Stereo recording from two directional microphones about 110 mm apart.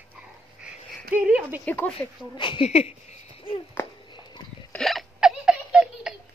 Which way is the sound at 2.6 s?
70° left (ahead or behind).